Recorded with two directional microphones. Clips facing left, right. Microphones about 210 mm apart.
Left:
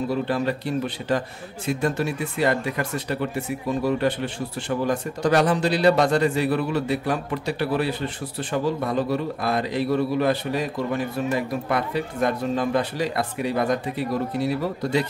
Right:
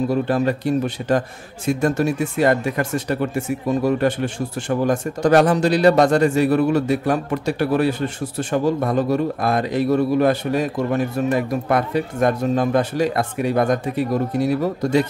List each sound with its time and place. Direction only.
0.1 s speech: 45° right (ahead or behind)